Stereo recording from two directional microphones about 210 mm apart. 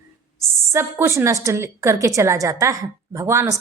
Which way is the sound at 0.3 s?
10° right (ahead or behind).